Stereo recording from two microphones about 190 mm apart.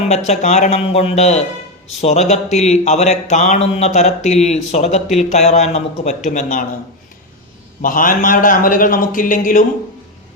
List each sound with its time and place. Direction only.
0.1 s speech: 35° left (ahead or behind)
7.8 s a man's voice: 45° left (ahead or behind)